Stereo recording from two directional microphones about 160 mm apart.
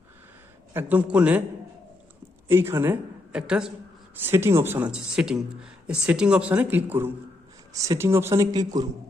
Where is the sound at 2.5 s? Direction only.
15° right (ahead or behind).